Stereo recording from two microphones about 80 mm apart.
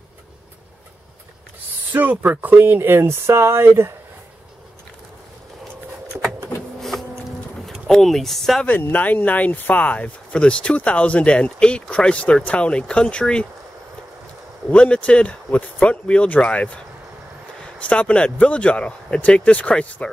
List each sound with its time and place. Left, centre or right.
1.9 s speech: right
6.8 s a sound: centre
8.6 s speech: left
14.7 s speech: centre